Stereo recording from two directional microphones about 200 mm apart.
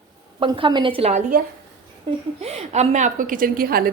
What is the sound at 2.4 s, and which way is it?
Speech, 30° right (ahead or behind).